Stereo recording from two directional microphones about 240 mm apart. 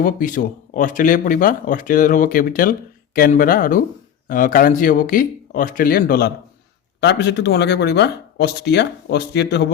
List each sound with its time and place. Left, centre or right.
0.0 s speech: left